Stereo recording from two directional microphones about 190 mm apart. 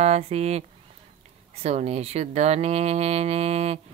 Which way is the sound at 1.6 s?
35° right (ahead or behind).